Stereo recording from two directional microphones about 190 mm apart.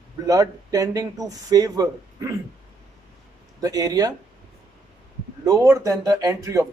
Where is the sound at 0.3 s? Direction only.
20° right (ahead or behind).